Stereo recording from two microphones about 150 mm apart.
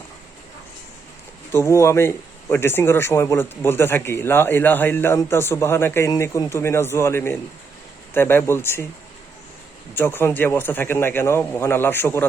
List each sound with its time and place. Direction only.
1.5 s a man's voice: 20° left (ahead or behind)
9.9 s a man's voice: 15° left (ahead or behind)